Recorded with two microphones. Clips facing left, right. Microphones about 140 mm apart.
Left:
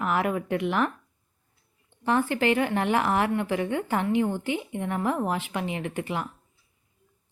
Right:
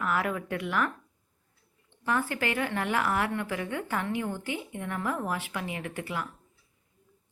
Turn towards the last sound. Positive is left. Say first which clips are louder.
# left 4 dB
turn(degrees=20)  # may be behind; listen again after turning